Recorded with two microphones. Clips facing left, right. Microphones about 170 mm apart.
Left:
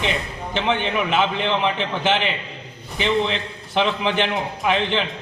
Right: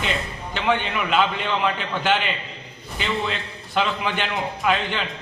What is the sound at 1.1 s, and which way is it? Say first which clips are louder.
A man's voice: right 1 dB; 20° left (ahead or behind).